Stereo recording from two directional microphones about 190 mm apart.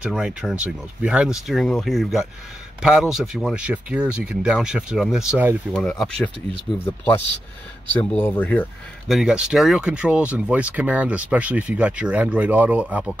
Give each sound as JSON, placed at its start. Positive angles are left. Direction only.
{"t": 0.0, "sound": "speech", "side_deg": -5}
{"t": 7.9, "sound": "speech", "side_deg": 10}